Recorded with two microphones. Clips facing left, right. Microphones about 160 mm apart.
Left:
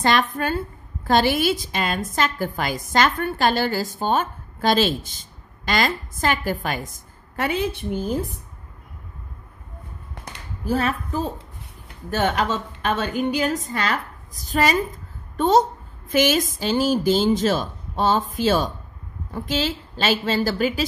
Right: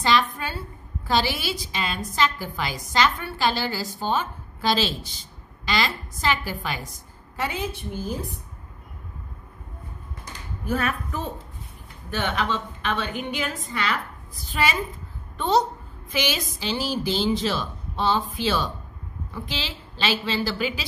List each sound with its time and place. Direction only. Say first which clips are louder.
0.0 s a woman's voice: left 2 dB; 50° left (ahead or behind)
10.6 s a woman's voice: left 3 dB; 30° left (ahead or behind)
12.1 s a woman's voice: left 4 dB; 45° left (ahead or behind)